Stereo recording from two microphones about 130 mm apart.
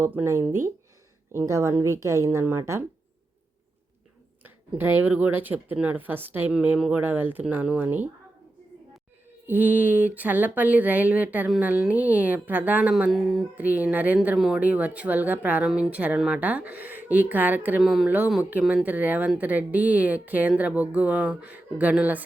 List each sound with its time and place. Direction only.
0.0 s a woman's voice: 15° right (ahead or behind)
4.4 s speech: 15° right (ahead or behind)
9.5 s speech: 15° right (ahead or behind)